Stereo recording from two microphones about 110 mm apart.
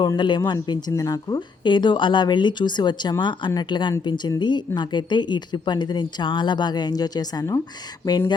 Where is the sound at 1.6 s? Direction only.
45° left (ahead or behind).